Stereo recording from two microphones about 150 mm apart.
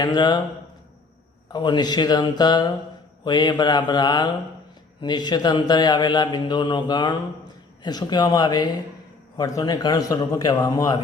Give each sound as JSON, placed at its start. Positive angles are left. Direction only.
{"t": 0.0, "sound": "speech", "side_deg": 30}
{"t": 1.5, "sound": "speech", "side_deg": 30}